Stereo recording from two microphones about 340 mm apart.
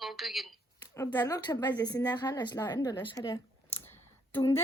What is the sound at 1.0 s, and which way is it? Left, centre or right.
A woman's voice, centre.